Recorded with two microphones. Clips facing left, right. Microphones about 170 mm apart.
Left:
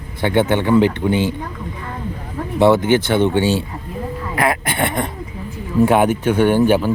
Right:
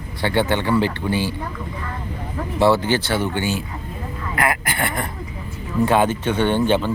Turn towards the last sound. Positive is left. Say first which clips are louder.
# left 4 dB
turn(degrees=10)  # may be behind; listen again after turning